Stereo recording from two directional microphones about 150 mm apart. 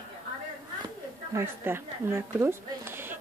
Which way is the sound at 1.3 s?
15° right (ahead or behind).